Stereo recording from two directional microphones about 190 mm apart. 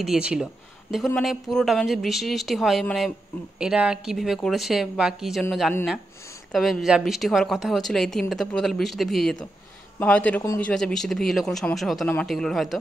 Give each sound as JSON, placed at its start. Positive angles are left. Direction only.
{"t": 0.0, "sound": "a woman's voice", "side_deg": -5}